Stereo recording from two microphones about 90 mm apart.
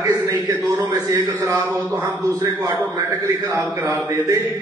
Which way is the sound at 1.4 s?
40° right (ahead or behind).